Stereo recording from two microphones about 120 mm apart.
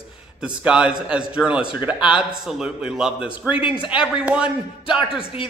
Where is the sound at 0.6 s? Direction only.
10° right (ahead or behind).